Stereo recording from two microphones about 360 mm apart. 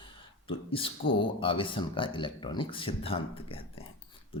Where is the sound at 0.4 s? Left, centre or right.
Centre.